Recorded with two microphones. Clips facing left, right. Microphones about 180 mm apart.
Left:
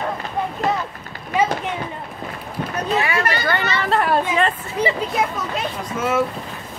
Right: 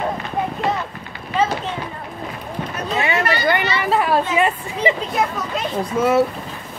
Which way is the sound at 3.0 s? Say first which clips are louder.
Right 6 dB; 20° right (ahead or behind).